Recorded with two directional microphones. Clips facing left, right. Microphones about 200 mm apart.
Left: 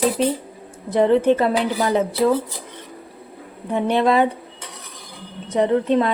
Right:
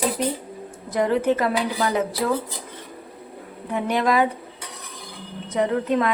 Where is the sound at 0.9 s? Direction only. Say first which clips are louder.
Left 5 dB; 25° left (ahead or behind).